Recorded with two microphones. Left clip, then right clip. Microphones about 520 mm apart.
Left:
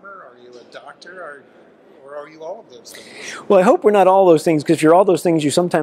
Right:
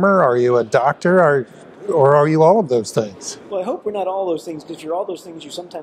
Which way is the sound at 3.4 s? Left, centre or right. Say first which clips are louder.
Left 11 dB; left.